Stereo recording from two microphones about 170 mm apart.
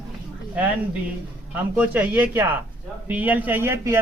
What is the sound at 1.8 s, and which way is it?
A man's voice, 10° right (ahead or behind).